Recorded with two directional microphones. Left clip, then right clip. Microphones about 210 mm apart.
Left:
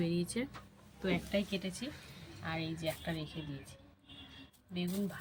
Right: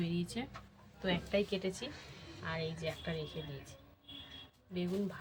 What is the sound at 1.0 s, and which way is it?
Speech, 40° right (ahead or behind).